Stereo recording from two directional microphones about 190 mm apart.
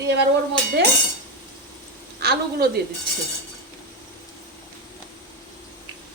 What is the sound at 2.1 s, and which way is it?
Speech, 55° right (ahead or behind).